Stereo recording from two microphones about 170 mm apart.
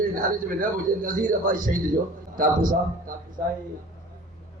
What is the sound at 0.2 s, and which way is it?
A man's voice, 55° right (ahead or behind).